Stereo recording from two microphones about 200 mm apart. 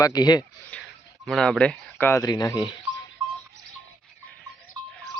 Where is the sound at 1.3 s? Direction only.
Centre (ahead or behind); by 2.7 s 20° left (ahead or behind).